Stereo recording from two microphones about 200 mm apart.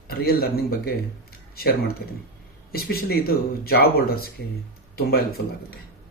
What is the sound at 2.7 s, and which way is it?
Speech, 50° left (ahead or behind).